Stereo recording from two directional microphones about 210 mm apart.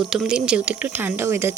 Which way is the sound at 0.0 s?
Centre (ahead or behind).